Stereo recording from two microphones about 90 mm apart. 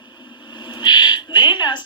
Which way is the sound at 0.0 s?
55° left (ahead or behind).